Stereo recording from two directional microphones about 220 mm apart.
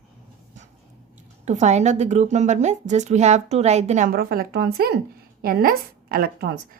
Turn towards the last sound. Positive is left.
turn(degrees=-40)  # may be behind; listen again after turning